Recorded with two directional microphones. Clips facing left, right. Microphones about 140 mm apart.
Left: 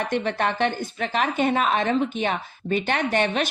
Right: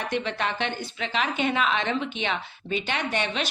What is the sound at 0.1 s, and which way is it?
A woman's voice, 50° left (ahead or behind).